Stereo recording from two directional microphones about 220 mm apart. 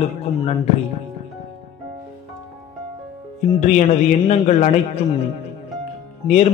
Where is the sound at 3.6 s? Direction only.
30° left (ahead or behind).